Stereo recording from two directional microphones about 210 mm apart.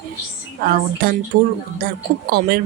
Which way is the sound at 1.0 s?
45° right (ahead or behind).